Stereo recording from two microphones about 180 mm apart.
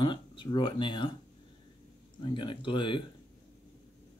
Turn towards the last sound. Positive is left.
turn(degrees=30)  # may be behind; listen again after turning